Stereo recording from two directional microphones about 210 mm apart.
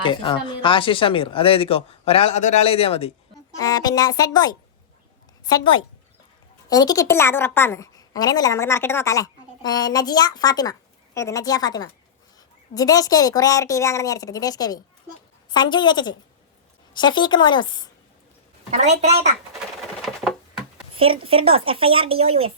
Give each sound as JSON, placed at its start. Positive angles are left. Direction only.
{"t": 0.0, "sound": "a woman's voice", "side_deg": 25}
{"t": 18.7, "sound": "a woman's voice", "side_deg": -35}
{"t": 20.9, "sound": "speech", "side_deg": -25}